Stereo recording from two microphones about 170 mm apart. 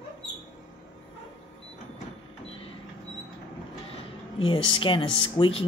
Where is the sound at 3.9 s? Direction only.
30° left (ahead or behind).